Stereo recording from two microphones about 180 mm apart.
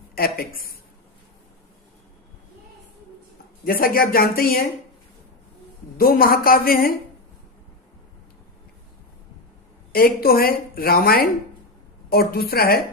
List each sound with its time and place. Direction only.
0.2 s a woman's voice: 55° left (ahead or behind)
3.6 s a woman's voice: 55° left (ahead or behind)
6.0 s a woman's voice: 55° left (ahead or behind)
9.9 s a woman's voice: 55° left (ahead or behind)